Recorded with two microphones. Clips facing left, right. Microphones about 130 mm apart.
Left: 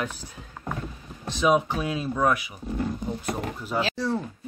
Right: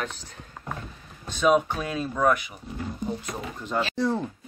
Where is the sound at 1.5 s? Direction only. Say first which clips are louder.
Right 1 dB; 10° left (ahead or behind).